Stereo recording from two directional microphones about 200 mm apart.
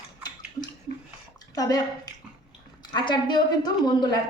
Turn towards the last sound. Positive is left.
turn(degrees=20)  # may be behind; listen again after turning